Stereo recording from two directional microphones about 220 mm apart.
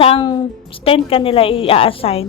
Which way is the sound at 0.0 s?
20° left (ahead or behind).